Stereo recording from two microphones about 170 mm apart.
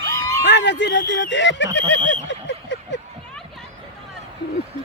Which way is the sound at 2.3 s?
90° left.